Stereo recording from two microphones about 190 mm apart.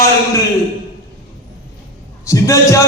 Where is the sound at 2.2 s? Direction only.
15° left (ahead or behind).